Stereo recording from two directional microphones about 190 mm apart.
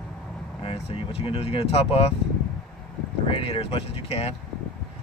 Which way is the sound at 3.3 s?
30° left (ahead or behind).